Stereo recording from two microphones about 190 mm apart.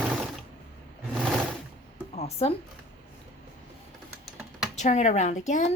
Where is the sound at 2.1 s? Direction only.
35° left (ahead or behind).